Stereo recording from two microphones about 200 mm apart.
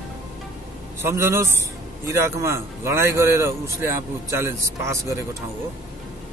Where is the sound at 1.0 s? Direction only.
15° right (ahead or behind).